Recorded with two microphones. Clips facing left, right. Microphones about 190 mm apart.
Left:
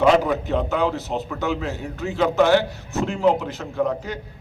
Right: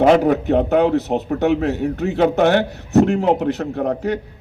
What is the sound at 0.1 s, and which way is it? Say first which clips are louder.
A man's voice: right 5 dB; 60° right (ahead or behind).